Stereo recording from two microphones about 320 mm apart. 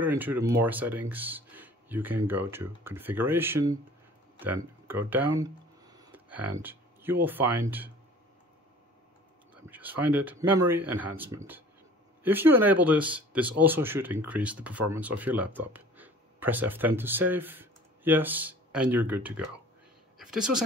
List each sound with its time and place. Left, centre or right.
0.0 s speech: centre
9.7 s speech: centre